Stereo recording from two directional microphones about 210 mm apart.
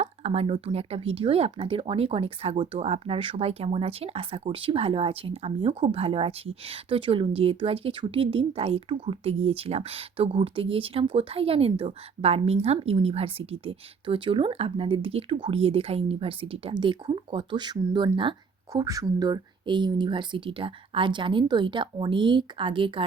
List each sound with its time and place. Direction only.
0.0 s speech: 30° right (ahead or behind)